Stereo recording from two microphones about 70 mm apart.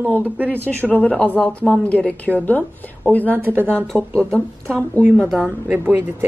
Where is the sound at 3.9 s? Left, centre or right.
Centre.